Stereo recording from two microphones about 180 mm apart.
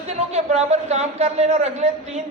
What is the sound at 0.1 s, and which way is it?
A woman's voice, 35° right (ahead or behind).